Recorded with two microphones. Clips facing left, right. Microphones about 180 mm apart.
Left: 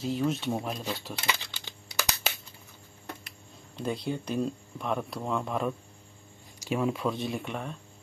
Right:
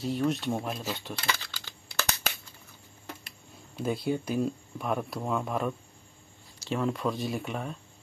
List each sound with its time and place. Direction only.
0.0 s speech: centre (ahead or behind)
1.1 s crushing: 15° left (ahead or behind)
3.7 s speech: 5° right (ahead or behind)
6.6 s speech: 10° left (ahead or behind)